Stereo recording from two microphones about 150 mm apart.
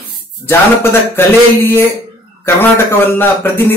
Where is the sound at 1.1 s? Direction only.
15° left (ahead or behind).